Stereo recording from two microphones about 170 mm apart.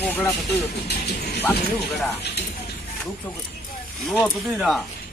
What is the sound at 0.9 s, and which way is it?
Speech, 70° left (ahead or behind).